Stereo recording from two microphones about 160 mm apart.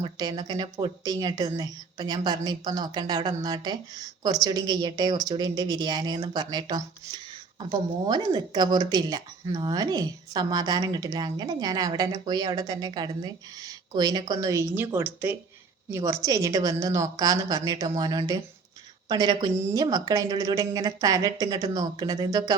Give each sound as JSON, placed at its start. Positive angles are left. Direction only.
{"t": 0.0, "sound": "speech", "side_deg": -25}